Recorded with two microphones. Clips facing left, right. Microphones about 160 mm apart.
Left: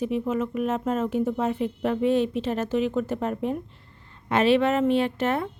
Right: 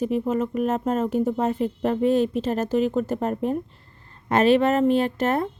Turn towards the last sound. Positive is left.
turn(degrees=-40)  # may be behind; listen again after turning